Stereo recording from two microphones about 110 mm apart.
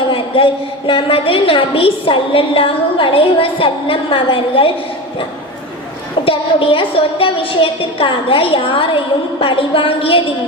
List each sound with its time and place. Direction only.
0.1 s a woman's voice: 50° left (ahead or behind)
6.2 s a woman's voice: 55° left (ahead or behind)